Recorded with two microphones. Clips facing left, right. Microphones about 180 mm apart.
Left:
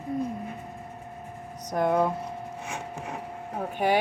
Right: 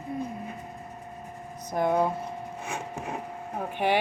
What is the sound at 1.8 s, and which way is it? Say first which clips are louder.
Speech: left 1 dB; 55° left (ahead or behind).